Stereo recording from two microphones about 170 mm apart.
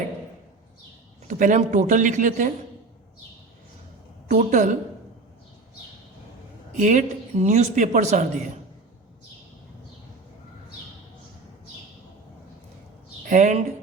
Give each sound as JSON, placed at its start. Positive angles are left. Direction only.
{"t": 1.3, "sound": "speech", "side_deg": -45}
{"t": 4.3, "sound": "speech", "side_deg": -45}
{"t": 6.7, "sound": "speech", "side_deg": -45}
{"t": 13.2, "sound": "speech", "side_deg": -45}